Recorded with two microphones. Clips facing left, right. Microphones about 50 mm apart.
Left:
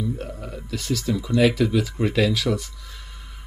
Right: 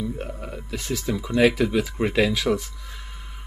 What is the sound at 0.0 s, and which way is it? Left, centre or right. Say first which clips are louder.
Speech: left 1 dB; right.